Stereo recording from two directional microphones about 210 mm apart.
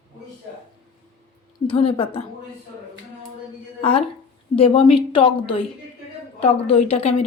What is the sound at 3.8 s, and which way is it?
Speech, 25° left (ahead or behind).